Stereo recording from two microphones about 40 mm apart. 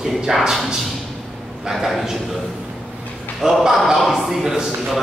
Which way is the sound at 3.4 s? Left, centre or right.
Centre.